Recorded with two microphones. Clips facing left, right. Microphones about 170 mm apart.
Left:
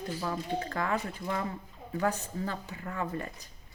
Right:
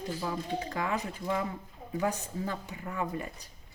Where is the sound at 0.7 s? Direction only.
15° right (ahead or behind).